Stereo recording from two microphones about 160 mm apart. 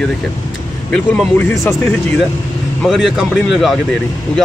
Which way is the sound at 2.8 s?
Centre (ahead or behind).